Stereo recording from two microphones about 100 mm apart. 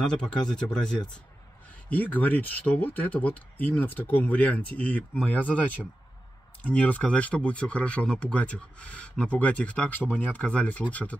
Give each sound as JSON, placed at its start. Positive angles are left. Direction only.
{"t": 0.0, "sound": "speech", "side_deg": 10}
{"t": 6.6, "sound": "speech", "side_deg": 15}